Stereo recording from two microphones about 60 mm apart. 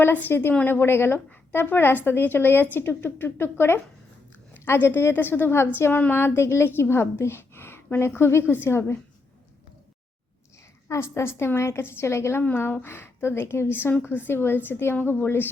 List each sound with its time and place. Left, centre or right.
0.3 s a woman's voice: left
5.9 s a woman's voice: left
10.8 s a woman's voice: left
12.5 s a woman's voice: left